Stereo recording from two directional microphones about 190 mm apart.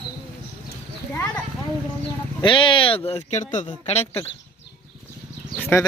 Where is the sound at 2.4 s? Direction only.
25° left (ahead or behind).